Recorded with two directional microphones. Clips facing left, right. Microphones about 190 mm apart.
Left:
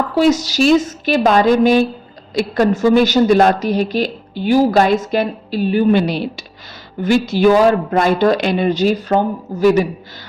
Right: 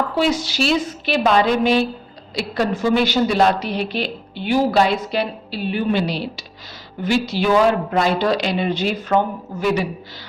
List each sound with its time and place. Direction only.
0.2 s a woman's voice: 40° left (ahead or behind)